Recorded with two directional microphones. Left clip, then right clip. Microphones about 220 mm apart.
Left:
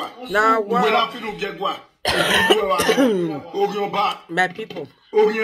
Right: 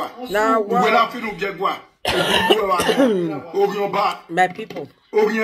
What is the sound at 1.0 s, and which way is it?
Speech, 30° right (ahead or behind).